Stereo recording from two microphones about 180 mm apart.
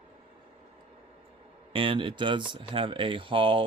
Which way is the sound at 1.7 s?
30° right (ahead or behind).